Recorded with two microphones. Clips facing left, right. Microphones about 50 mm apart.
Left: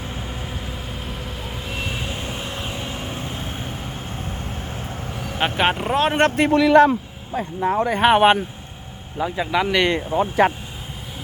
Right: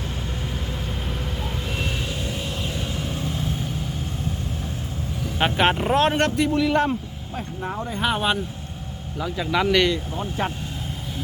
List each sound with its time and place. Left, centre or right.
1.0 s vehicle: centre
2.0 s vehicle: left
5.4 s speech: centre
6.1 s a man's voice: left
6.5 s speech: left
7.9 s speech: left
9.1 s speech: left
10.2 s speech: left